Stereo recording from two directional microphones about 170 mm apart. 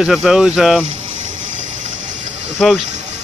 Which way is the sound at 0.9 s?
45° right (ahead or behind).